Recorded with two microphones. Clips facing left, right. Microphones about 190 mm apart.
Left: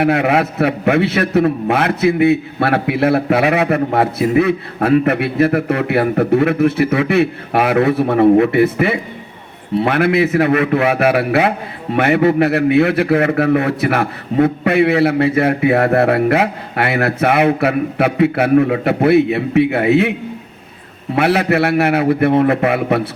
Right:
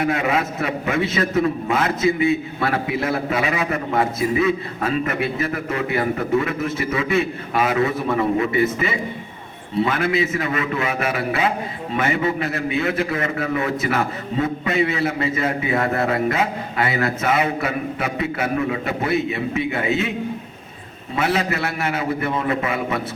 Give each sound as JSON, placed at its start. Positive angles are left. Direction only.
{"t": 0.0, "sound": "a man's voice", "side_deg": 65}
{"t": 21.2, "sound": "a man's voice", "side_deg": 65}